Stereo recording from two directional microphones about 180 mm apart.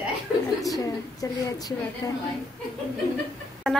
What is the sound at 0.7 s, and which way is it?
A woman's voice, 20° left (ahead or behind).